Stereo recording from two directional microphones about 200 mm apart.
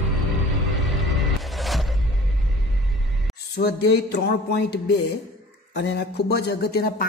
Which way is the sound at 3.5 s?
55° left (ahead or behind).